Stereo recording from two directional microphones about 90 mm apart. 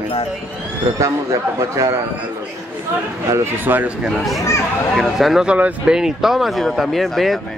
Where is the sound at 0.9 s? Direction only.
35° right (ahead or behind).